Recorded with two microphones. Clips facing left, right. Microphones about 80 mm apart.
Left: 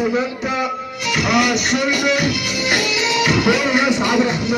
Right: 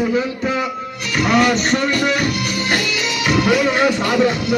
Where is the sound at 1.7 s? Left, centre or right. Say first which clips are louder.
Even; centre.